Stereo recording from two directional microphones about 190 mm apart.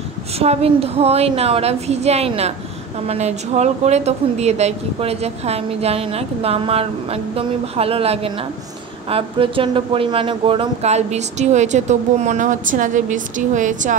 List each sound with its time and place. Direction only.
0.4 s speech: 30° right (ahead or behind)